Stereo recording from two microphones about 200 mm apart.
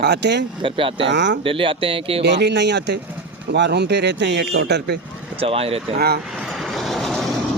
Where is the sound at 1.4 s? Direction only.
25° right (ahead or behind).